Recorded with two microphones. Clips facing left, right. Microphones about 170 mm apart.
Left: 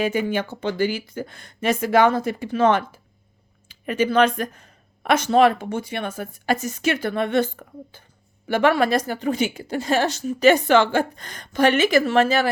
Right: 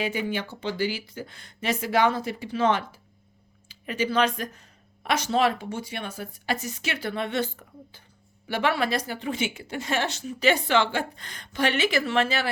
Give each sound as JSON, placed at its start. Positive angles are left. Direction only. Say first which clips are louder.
{"t": 0.0, "sound": "speech", "louder": "left 6 dB", "side_deg": 45}